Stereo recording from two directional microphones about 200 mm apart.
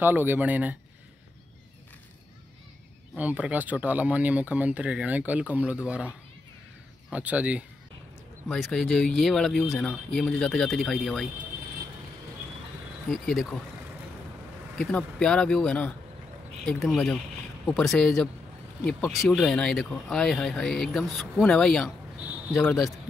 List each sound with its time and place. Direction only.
0.0 s speech: 10° right (ahead or behind)
3.2 s speech: 5° right (ahead or behind)
13.1 s speech: centre (ahead or behind)
14.8 s speech: 5° left (ahead or behind)